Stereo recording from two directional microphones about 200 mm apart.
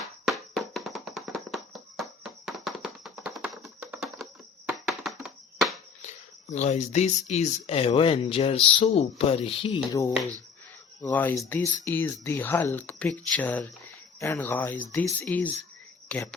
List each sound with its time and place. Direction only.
0.3 s hands: centre (ahead or behind)
6.0 s speech: 35° left (ahead or behind)
11.0 s speech: 10° left (ahead or behind)